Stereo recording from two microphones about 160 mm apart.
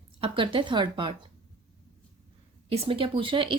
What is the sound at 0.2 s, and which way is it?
Speech, 30° right (ahead or behind).